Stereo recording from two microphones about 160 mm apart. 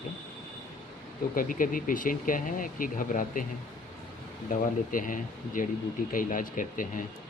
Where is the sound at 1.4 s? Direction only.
60° left (ahead or behind).